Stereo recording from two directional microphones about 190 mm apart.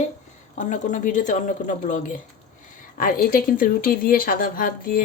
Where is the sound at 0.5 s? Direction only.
40° left (ahead or behind).